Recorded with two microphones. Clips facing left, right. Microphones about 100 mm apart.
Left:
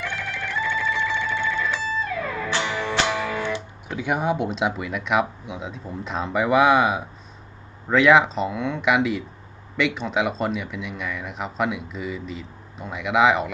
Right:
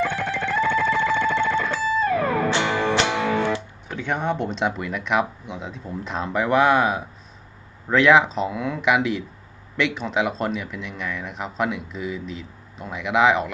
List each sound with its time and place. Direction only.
0.2 s music: 55° right (ahead or behind)
3.8 s speech: 10° left (ahead or behind)